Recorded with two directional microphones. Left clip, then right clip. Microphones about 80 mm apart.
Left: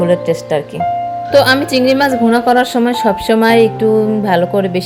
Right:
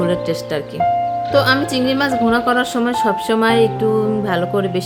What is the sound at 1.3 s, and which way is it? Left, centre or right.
A woman's voice, left.